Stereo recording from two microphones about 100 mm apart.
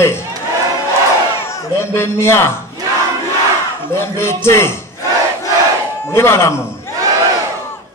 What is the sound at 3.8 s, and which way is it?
Speech, 25° left (ahead or behind).